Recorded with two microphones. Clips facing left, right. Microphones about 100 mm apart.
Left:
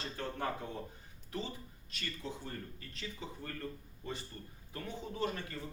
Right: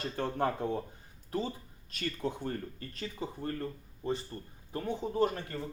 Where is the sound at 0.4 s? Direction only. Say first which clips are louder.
Right 8 dB; 45° right (ahead or behind).